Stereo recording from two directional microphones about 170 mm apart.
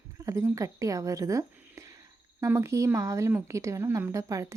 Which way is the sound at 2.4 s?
15° right (ahead or behind).